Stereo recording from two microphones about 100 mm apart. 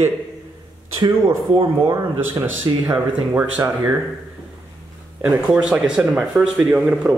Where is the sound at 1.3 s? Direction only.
35° right (ahead or behind).